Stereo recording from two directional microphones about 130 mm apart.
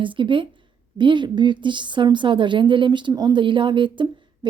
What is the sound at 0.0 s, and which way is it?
A woman's voice, 40° right (ahead or behind).